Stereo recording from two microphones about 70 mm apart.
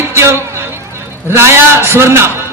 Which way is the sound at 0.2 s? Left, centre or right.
Right.